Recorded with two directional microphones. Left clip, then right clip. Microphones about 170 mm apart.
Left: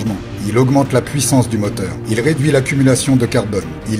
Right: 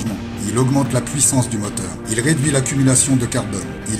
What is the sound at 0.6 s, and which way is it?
Speech, 30° left (ahead or behind).